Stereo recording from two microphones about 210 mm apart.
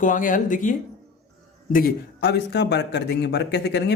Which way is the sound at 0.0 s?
40° left (ahead or behind).